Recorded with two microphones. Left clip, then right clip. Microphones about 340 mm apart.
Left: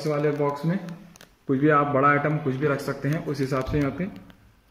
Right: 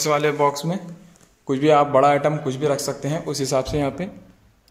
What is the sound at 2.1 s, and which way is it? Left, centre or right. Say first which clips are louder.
Speech: right 3 dB; right.